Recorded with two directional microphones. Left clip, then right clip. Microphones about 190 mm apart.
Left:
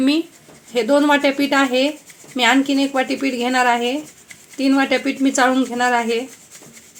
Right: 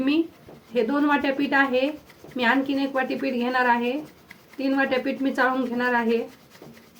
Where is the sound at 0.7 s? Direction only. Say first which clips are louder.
Left 7 dB; 40° left (ahead or behind).